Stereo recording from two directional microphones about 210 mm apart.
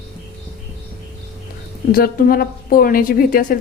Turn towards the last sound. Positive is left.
turn(degrees=40)  # may be behind; listen again after turning